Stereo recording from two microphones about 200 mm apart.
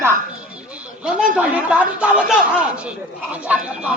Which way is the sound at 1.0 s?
5° right (ahead or behind).